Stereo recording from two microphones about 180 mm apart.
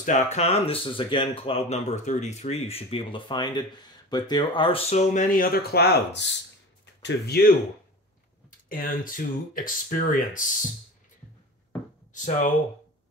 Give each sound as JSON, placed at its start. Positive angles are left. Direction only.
{"t": 0.0, "sound": "speech", "side_deg": 40}
{"t": 8.5, "sound": "speech", "side_deg": 50}
{"t": 12.1, "sound": "speech", "side_deg": 45}